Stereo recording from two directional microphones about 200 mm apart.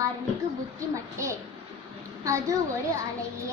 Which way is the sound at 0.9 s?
15° right (ahead or behind).